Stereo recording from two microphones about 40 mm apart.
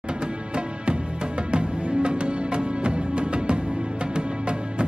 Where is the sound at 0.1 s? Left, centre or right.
Right.